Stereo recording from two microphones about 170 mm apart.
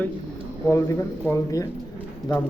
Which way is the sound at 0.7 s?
15° left (ahead or behind).